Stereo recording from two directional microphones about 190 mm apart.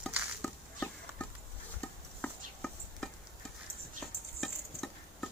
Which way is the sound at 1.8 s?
5° left (ahead or behind).